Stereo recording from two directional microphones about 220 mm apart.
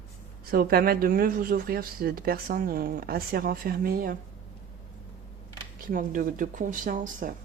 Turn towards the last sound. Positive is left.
turn(degrees=-35)  # may be behind; listen again after turning